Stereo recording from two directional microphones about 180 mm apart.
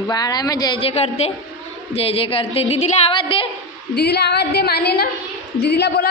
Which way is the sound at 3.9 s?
65° left (ahead or behind).